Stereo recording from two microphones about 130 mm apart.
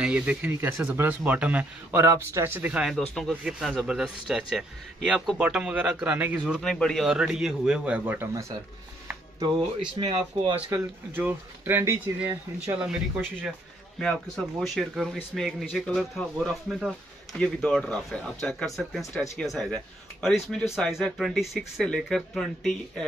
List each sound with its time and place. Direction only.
0.0 s speech: 5° right (ahead or behind)
9.9 s speech: 45° right (ahead or behind)
10.7 s speech: 15° right (ahead or behind)
13.9 s speech: 5° left (ahead or behind)